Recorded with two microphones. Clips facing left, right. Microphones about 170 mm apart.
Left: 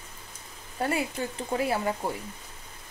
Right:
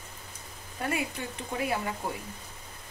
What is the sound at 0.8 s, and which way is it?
Speech, 30° left (ahead or behind).